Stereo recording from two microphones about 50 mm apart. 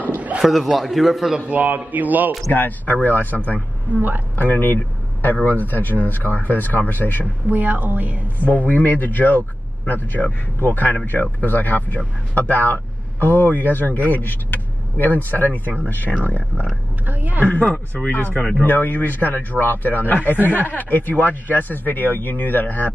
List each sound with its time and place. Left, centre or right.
0.1 s a sound: right
0.4 s a man's voice: centre
1.5 s a woman's voice: right
2.5 s speech: left
3.5 s a woman's voice: right
4.4 s speech: left
7.4 s a woman's voice: right
8.5 s speech: left
17.0 s a woman's voice: right
17.5 s speech: left